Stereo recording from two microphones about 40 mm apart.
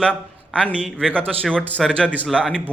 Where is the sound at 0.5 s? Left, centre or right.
Left.